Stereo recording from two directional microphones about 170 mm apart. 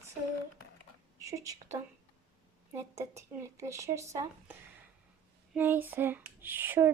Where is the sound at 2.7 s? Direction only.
15° right (ahead or behind).